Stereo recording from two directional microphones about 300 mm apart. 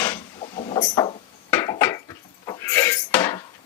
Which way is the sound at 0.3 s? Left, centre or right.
Centre.